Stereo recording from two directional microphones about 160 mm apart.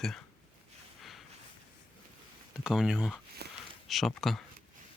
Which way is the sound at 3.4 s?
90° right.